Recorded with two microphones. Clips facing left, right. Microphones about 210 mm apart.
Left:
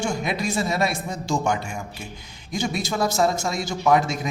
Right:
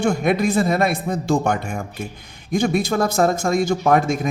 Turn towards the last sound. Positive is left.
turn(degrees=-55)  # may be behind; listen again after turning